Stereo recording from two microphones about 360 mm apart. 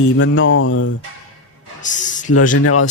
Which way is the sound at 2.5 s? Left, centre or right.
Left.